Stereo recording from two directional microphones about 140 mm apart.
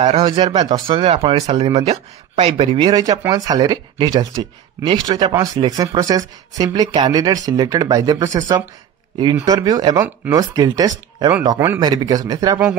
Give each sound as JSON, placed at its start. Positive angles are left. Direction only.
{"t": 0.0, "sound": "speech", "side_deg": -40}
{"t": 2.9, "sound": "speech", "side_deg": -25}